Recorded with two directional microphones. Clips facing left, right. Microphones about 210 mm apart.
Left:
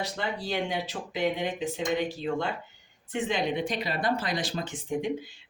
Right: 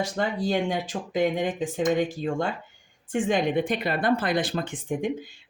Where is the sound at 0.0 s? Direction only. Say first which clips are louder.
Right 6 dB; 50° right (ahead or behind).